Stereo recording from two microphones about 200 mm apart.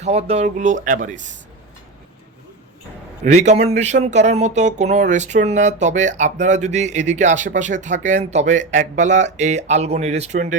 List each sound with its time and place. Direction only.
0.0 s speech: 30° right (ahead or behind)
3.2 s speech: 35° right (ahead or behind)